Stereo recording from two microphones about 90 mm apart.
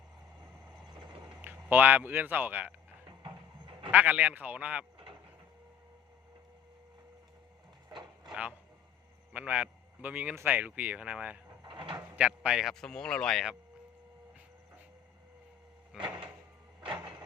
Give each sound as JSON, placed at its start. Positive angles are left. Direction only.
{"t": 0.9, "sound": "a sound", "side_deg": -60}
{"t": 1.4, "sound": "speech", "side_deg": -20}
{"t": 3.1, "sound": "sheep", "side_deg": -65}
{"t": 3.9, "sound": "speech", "side_deg": -15}
{"t": 7.9, "sound": "a sound", "side_deg": -55}
{"t": 9.3, "sound": "a man's voice", "side_deg": -15}
{"t": 11.6, "sound": "a sound", "side_deg": -65}
{"t": 11.9, "sound": "speech", "side_deg": -15}
{"t": 12.7, "sound": "speech", "side_deg": 5}
{"t": 15.9, "sound": "speech", "side_deg": -5}
{"t": 16.8, "sound": "vehicle", "side_deg": -65}